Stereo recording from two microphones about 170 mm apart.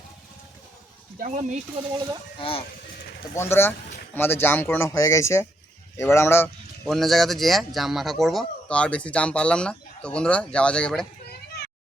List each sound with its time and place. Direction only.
1.2 s speech: 45° right (ahead or behind)
2.4 s speech: 35° left (ahead or behind)
3.3 s a man's voice: 15° left (ahead or behind)
6.8 s speech: centre (ahead or behind)